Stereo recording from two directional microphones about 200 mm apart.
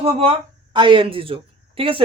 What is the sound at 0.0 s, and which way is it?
A woman's voice, 25° right (ahead or behind).